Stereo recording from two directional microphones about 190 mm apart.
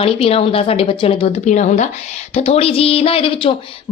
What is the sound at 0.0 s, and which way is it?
Speech, 30° left (ahead or behind).